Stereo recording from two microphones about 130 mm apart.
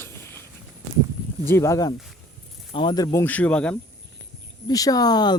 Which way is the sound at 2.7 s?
35° left (ahead or behind).